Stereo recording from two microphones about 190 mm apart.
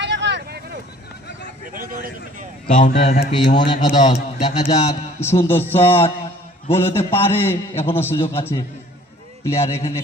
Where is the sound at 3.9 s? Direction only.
40° left (ahead or behind).